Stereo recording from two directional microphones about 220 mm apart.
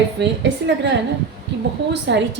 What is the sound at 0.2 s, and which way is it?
A woman's voice, 55° right (ahead or behind).